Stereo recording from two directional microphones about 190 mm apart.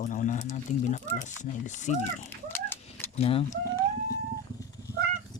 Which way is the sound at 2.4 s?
10° left (ahead or behind).